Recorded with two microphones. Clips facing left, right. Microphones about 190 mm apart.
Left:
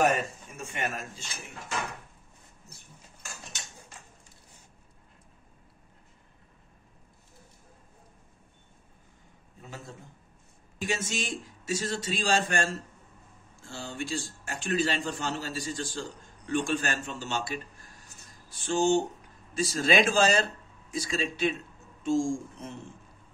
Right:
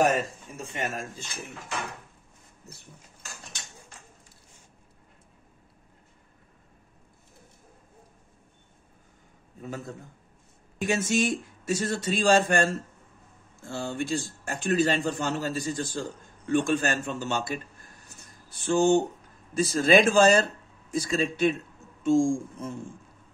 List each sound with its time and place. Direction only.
0.0 s a man's voice: 40° right (ahead or behind)
9.6 s a man's voice: 50° right (ahead or behind)
18.2 s a sound: 55° right (ahead or behind)
19.5 s a man's voice: 50° right (ahead or behind)